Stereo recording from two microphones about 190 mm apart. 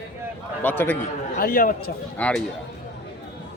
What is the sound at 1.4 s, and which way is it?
Speech, 45° left (ahead or behind).